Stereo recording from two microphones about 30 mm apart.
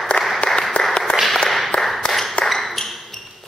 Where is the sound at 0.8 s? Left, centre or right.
Left.